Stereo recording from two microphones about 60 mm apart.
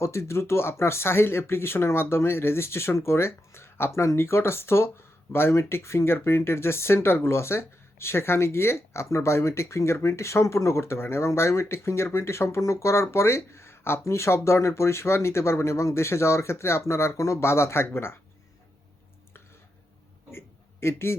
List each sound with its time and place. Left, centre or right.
0.0 s speech: left
20.8 s speech: left